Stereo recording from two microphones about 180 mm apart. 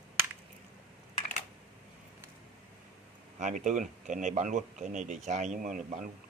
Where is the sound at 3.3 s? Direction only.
40° right (ahead or behind).